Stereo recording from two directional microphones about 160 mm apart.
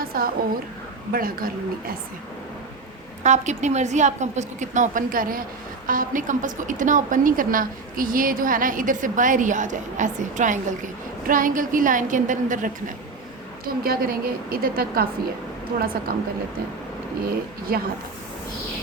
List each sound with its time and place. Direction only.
0.0 s a sound: 65° right (ahead or behind)
1.1 s a woman's voice: 65° right (ahead or behind)
3.2 s a woman's voice: 45° right (ahead or behind)
13.7 s a woman's voice: 70° right (ahead or behind)
16.1 s a woman's voice: 70° right (ahead or behind)